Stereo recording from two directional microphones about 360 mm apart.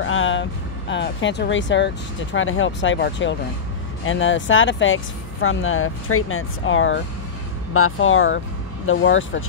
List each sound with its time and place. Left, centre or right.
0.0 s speech: left